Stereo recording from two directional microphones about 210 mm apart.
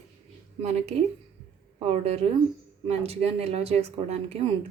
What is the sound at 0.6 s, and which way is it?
A woman's voice, 30° right (ahead or behind).